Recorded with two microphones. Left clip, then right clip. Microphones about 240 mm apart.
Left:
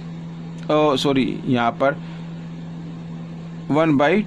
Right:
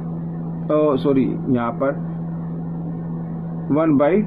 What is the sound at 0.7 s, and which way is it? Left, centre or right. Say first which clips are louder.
Speech: even; left.